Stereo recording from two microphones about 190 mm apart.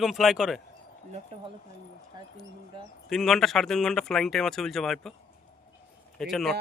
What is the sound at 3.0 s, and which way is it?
Speech, centre (ahead or behind).